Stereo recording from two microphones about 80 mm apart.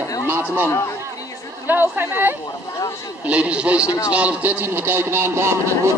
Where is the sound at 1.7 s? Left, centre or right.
Right.